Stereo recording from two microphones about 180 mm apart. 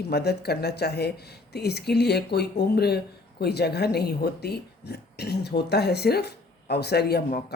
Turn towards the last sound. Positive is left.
turn(degrees=60)  # may be behind; listen again after turning